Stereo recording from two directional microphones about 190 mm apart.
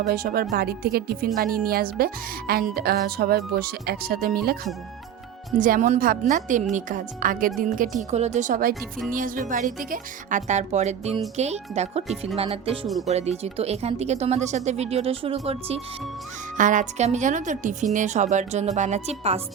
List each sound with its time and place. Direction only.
0.0 s speech: 55° right (ahead or behind); by 15.8 s 30° right (ahead or behind)
16.6 s speech: 40° right (ahead or behind)